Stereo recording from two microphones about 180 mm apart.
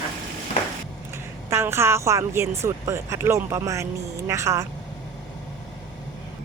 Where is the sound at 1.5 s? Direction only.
15° right (ahead or behind).